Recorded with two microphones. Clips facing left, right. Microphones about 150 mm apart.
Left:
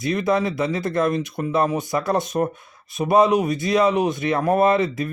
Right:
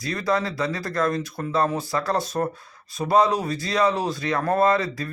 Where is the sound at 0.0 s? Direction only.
20° left (ahead or behind).